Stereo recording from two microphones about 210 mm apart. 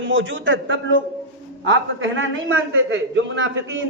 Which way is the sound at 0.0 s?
65° right (ahead or behind).